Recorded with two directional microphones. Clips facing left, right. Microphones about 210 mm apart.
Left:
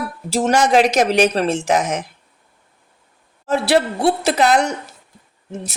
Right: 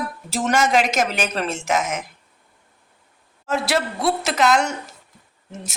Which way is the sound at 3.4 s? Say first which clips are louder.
Left 6 dB; 35° left (ahead or behind).